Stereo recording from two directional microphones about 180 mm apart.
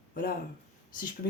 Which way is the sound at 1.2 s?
60° left (ahead or behind).